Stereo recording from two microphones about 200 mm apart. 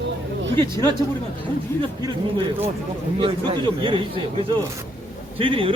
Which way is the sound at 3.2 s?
25° right (ahead or behind).